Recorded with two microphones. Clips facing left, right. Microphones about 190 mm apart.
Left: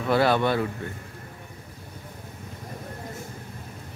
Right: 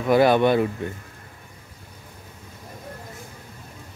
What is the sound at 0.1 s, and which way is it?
Speech, 15° right (ahead or behind).